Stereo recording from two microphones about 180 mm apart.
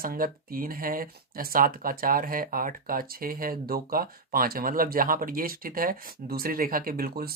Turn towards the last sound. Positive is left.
turn(degrees=-55)  # may be behind; listen again after turning